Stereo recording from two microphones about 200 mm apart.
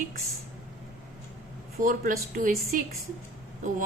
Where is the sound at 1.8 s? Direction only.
40° right (ahead or behind).